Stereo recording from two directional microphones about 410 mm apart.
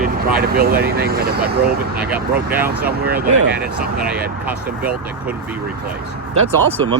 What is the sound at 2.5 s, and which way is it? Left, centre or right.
Speech, centre.